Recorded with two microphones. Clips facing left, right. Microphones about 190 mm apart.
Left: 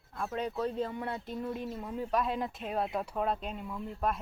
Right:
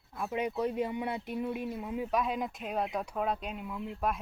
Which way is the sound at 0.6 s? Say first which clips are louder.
Right 1 dB; 15° right (ahead or behind).